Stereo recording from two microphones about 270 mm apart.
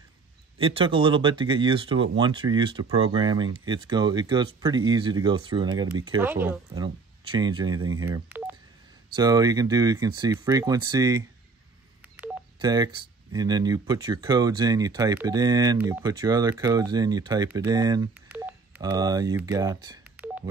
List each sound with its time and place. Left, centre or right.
0.6 s speech: centre
12.2 s telephone dialing: centre
12.5 s speech: centre